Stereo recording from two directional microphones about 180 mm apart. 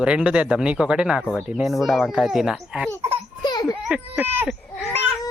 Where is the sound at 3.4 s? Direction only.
25° left (ahead or behind).